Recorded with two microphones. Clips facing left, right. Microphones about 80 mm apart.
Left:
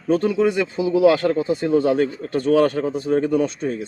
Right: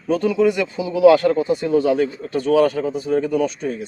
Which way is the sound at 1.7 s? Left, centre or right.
Left.